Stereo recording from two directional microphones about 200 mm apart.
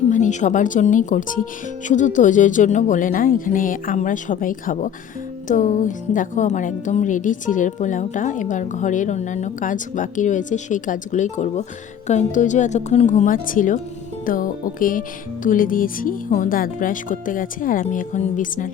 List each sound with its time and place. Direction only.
0.1 s a woman's voice: 35° left (ahead or behind)